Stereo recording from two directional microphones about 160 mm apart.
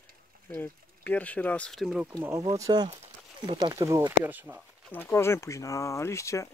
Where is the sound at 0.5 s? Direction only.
10° left (ahead or behind).